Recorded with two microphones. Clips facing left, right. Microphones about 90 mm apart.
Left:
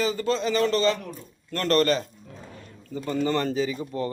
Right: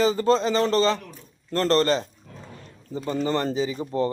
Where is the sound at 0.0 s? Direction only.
30° right (ahead or behind).